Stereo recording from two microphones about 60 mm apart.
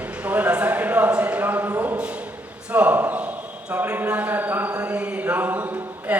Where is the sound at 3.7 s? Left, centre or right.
Right.